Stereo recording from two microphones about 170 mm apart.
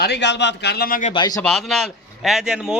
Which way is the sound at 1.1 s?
25° left (ahead or behind).